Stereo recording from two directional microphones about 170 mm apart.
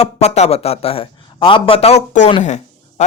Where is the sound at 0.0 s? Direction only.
40° left (ahead or behind).